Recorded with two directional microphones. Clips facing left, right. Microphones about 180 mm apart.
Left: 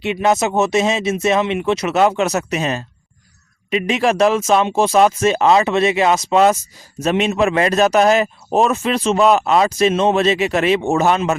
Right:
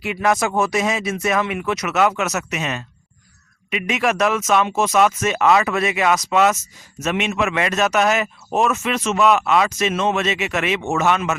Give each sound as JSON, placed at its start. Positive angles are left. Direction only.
{"t": 0.0, "sound": "speech", "side_deg": 25}